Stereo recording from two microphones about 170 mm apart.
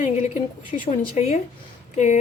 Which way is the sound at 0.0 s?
45° left (ahead or behind).